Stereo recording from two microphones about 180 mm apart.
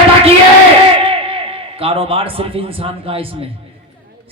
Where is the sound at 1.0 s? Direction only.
30° right (ahead or behind).